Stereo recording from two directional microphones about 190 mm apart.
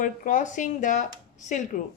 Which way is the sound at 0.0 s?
40° left (ahead or behind).